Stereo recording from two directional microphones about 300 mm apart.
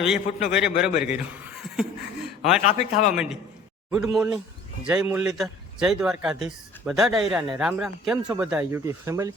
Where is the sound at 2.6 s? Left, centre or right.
Left.